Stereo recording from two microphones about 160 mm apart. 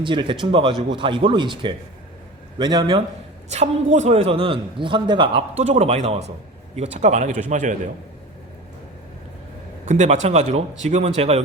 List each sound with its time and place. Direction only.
0.0 s a man's voice: 30° right (ahead or behind)
3.5 s a man's voice: 45° right (ahead or behind)
9.8 s speech: 50° right (ahead or behind)